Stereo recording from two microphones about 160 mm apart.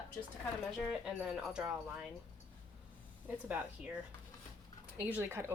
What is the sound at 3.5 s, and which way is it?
Speech, 10° right (ahead or behind).